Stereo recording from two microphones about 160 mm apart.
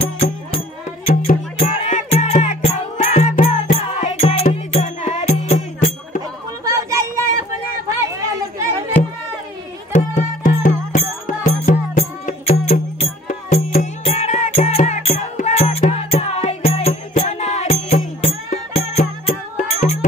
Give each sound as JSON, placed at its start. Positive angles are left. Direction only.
{"t": 0.0, "sound": "music", "side_deg": 35}
{"t": 6.6, "sound": "a sound", "side_deg": -20}
{"t": 9.9, "sound": "music", "side_deg": 55}
{"t": 11.7, "sound": "music", "side_deg": 50}